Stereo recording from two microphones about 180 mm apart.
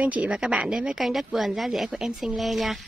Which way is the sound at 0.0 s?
5° right (ahead or behind).